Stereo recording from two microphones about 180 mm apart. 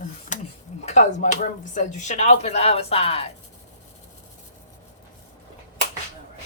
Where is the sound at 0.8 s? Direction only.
40° left (ahead or behind).